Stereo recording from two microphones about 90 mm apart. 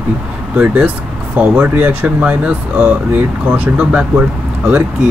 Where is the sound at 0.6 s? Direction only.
15° right (ahead or behind).